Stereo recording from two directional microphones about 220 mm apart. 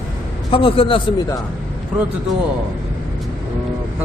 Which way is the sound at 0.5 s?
25° left (ahead or behind).